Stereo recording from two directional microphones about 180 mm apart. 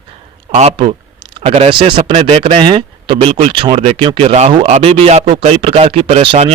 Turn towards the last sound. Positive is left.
turn(degrees=-30)  # may be behind; listen again after turning